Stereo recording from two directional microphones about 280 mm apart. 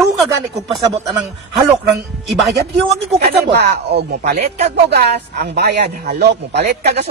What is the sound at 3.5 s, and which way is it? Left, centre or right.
Speech, right.